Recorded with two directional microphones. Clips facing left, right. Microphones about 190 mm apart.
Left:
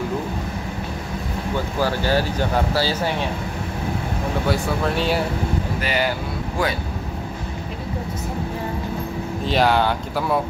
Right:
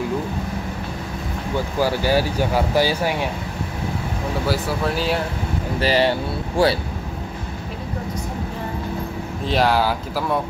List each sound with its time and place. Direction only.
1.8 s speech: 10° right (ahead or behind)
4.5 s speech: centre (ahead or behind)
5.8 s speech: 30° right (ahead or behind)
9.5 s speech: centre (ahead or behind)